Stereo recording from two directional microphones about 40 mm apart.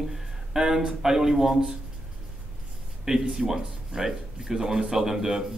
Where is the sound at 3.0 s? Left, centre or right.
Centre.